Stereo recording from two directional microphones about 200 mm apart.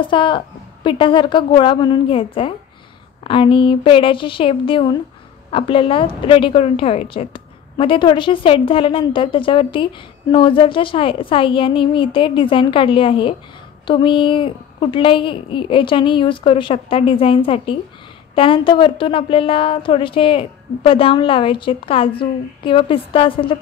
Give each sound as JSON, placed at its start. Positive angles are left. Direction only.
{"t": 0.0, "sound": "speech", "side_deg": 25}